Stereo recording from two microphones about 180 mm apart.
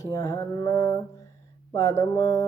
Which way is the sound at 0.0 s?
20° left (ahead or behind).